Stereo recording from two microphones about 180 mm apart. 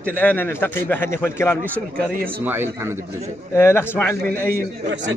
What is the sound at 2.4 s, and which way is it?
Speech, 10° right (ahead or behind).